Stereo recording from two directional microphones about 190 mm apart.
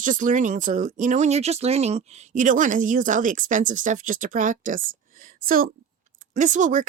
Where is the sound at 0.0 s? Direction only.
45° right (ahead or behind).